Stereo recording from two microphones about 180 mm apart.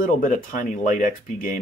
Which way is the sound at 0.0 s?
50° left (ahead or behind).